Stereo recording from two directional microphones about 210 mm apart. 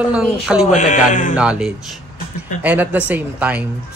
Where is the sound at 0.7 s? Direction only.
35° left (ahead or behind).